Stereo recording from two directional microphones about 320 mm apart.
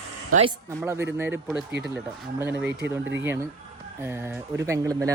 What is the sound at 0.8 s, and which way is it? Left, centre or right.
Speech, centre.